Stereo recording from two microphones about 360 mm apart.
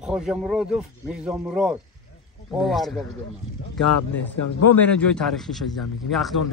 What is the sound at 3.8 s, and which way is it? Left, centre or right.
Speech, left.